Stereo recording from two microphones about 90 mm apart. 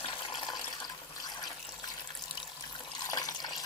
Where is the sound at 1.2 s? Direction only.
50° left (ahead or behind).